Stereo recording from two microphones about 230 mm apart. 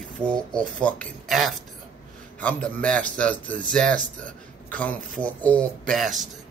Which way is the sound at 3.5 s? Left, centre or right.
Right.